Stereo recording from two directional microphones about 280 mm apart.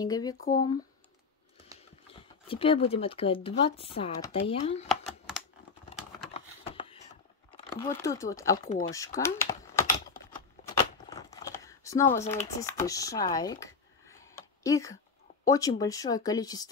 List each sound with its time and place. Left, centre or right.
0.0 s speech: centre
0.4 s speech: left
2.4 s speech: centre
4.8 s computer keyboard: centre
6.3 s a sound: centre
7.8 s speech: centre
8.6 s speech: left
9.2 s speech: centre
11.1 s a sound: centre
12.3 s speech: centre